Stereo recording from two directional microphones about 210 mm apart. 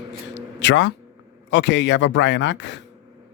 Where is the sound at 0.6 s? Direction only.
60° left (ahead or behind).